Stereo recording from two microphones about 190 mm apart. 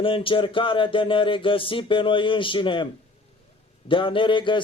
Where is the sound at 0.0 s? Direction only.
30° left (ahead or behind).